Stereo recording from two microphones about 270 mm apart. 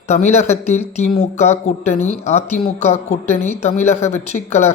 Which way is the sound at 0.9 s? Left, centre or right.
Left.